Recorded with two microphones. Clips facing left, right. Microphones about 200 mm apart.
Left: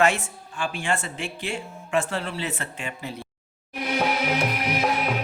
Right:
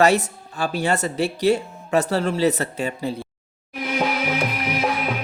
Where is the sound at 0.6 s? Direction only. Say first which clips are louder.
Right 6 dB; 40° right (ahead or behind).